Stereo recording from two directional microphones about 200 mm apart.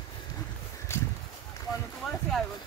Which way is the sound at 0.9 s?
15° left (ahead or behind).